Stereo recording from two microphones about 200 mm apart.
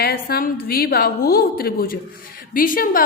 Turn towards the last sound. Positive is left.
turn(degrees=45)  # may be behind; listen again after turning